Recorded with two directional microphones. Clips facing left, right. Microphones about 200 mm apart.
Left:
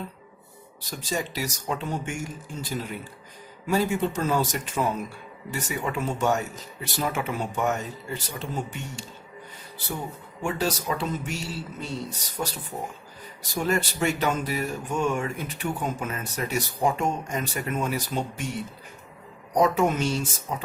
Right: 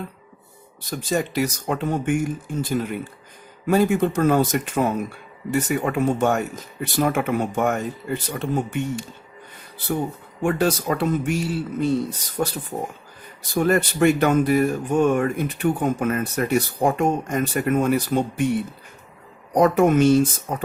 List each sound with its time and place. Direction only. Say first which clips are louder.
0.9 s speech: right 6 dB; 55° right (ahead or behind)